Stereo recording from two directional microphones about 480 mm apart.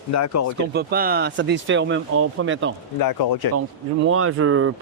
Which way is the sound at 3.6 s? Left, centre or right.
Right.